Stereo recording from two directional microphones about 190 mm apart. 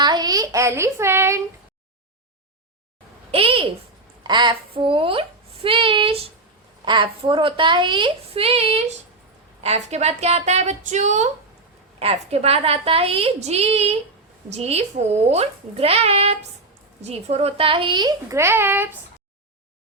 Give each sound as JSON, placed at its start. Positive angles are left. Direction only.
{"t": 0.0, "sound": "speech", "side_deg": -20}
{"t": 3.3, "sound": "a woman's voice", "side_deg": -30}